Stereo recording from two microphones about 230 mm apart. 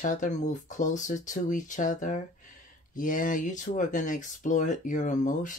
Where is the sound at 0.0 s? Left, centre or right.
Left.